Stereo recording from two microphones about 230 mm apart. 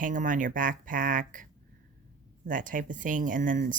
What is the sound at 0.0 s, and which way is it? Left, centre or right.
Speech, right.